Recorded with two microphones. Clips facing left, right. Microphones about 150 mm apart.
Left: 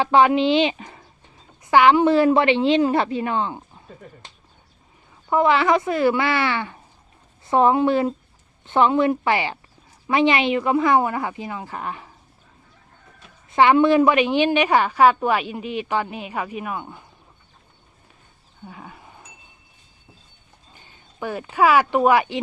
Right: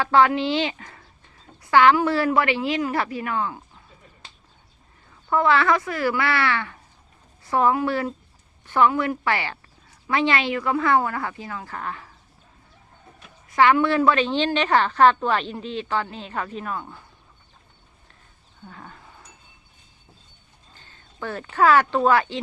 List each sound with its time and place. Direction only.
0.0 s a woman's voice: 20° left (ahead or behind)
5.3 s a woman's voice: 20° left (ahead or behind)
13.5 s a woman's voice: 20° left (ahead or behind)
18.6 s roaring cats: 10° left (ahead or behind)
20.7 s a sound: 15° left (ahead or behind)
21.5 s a woman's voice: 10° left (ahead or behind)